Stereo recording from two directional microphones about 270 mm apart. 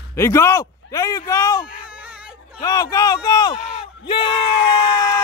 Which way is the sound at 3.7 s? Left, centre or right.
Centre.